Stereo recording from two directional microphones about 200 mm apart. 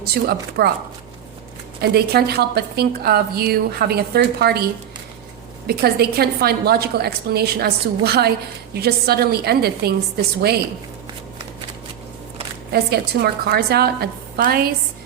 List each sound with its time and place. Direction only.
0.0 s a woman's voice: 50° right (ahead or behind)
1.8 s a woman's voice: 50° right (ahead or behind)
12.7 s a woman's voice: 50° right (ahead or behind)